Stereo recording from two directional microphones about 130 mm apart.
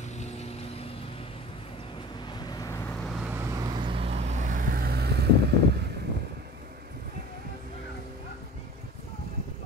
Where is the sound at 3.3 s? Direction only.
25° right (ahead or behind); by 4.7 s 85° right.